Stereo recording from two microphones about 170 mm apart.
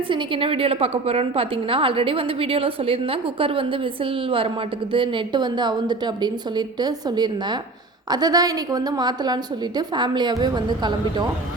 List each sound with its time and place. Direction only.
0.1 s a woman's voice: 30° right (ahead or behind)
4.9 s a woman's voice: 30° right (ahead or behind)